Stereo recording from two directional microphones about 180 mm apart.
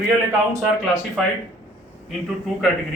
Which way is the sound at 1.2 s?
Centre (ahead or behind).